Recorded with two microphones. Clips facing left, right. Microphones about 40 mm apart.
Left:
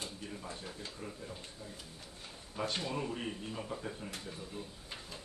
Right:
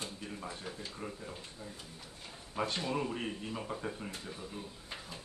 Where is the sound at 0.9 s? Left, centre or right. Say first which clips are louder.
Right 2 dB; right.